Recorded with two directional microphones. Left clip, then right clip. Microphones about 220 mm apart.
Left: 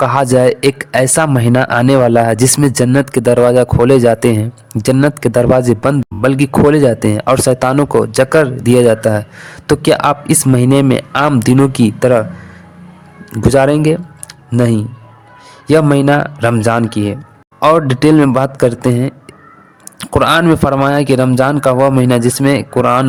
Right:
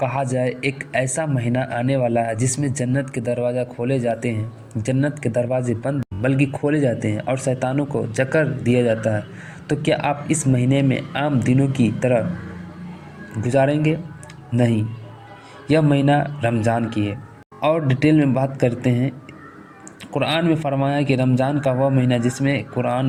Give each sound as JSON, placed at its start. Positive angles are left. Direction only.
{"t": 0.0, "sound": "a man's voice", "side_deg": 45}
{"t": 13.3, "sound": "a man's voice", "side_deg": 40}